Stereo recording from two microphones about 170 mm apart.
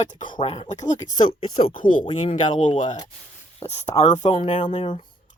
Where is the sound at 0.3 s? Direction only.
35° left (ahead or behind).